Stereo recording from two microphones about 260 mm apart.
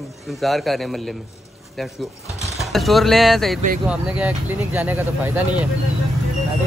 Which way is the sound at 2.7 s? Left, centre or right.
Centre.